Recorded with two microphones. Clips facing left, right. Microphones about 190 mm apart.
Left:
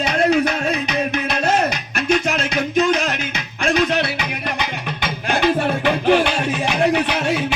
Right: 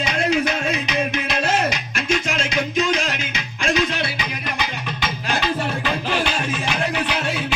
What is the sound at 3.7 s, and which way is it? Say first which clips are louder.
Music: left 4 dB; 60° left (ahead or behind).